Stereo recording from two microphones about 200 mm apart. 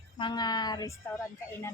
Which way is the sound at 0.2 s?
20° left (ahead or behind).